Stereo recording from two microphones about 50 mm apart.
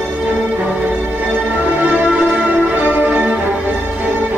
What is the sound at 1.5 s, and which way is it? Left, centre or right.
Music, right.